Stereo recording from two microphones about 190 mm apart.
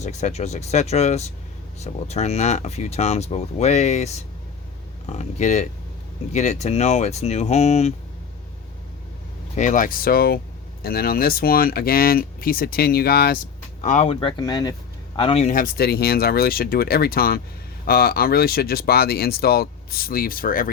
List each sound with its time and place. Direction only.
0.0 s speech: 35° left (ahead or behind)
9.6 s speech: 40° left (ahead or behind)
13.8 s speech: 40° left (ahead or behind)